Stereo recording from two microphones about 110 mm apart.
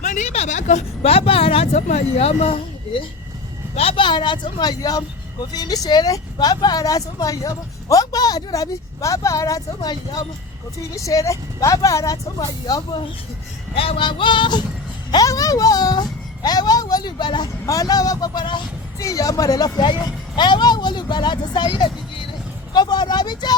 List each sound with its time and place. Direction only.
0.2 s a woman's voice: 85° left
3.8 s a woman's voice: 55° left (ahead or behind); by 13.0 s 35° left (ahead or behind)
13.7 s speech: 55° left (ahead or behind)
15.1 s a woman's voice: 30° left (ahead or behind)
18.9 s a woman's voice: 30° left (ahead or behind)